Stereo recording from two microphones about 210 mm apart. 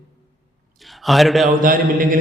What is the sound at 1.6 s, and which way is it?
Speech, 40° right (ahead or behind).